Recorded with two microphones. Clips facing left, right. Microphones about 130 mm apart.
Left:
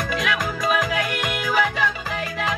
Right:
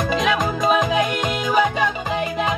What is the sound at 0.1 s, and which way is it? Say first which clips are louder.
Music: right 6 dB; 25° right (ahead or behind).